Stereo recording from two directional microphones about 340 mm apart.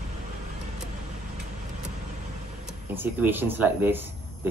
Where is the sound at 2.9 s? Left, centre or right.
Centre.